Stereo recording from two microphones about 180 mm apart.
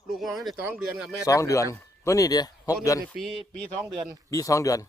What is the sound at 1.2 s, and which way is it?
Speech, 15° left (ahead or behind).